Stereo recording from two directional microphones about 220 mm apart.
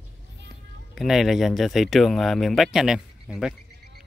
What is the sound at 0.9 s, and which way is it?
Speech, centre (ahead or behind).